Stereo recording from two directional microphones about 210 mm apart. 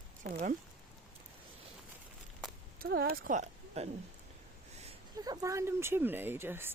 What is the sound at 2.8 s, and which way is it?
Speech, 45° right (ahead or behind).